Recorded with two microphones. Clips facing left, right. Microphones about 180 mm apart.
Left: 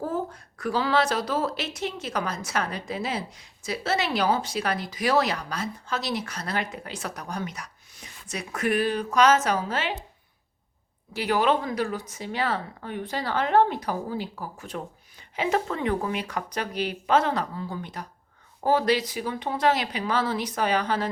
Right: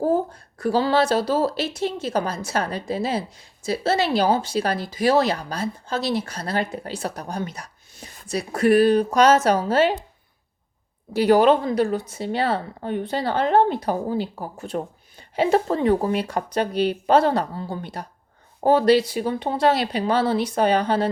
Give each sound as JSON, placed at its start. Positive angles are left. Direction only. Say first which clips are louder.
{"t": 0.0, "sound": "speech", "louder": "right 8 dB", "side_deg": -30}
{"t": 11.1, "sound": "speech", "louder": "right 8 dB", "side_deg": -40}